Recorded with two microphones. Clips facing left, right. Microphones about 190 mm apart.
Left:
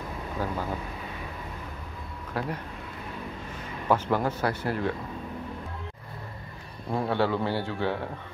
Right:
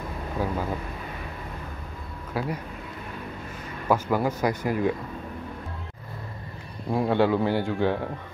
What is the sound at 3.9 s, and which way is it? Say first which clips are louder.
A man's voice: right 2 dB; 10° right (ahead or behind).